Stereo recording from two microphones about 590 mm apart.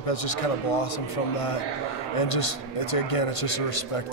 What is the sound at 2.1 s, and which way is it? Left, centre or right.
A man's voice, left.